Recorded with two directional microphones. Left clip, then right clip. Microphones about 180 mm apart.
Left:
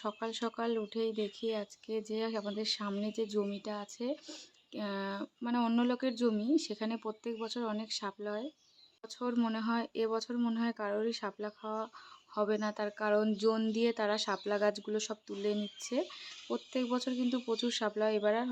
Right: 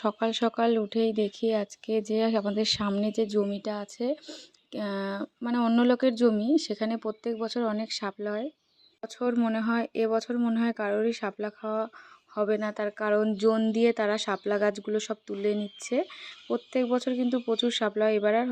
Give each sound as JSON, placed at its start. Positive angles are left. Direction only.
{"t": 0.0, "sound": "speech", "side_deg": -35}